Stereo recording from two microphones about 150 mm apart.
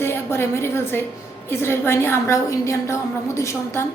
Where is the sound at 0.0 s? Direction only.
15° left (ahead or behind).